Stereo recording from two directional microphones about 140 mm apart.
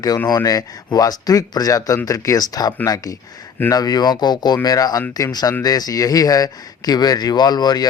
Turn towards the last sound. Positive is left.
turn(degrees=30)  # may be behind; listen again after turning